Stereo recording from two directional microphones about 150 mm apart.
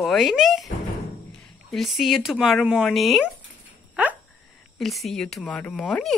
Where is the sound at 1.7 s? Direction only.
Centre (ahead or behind).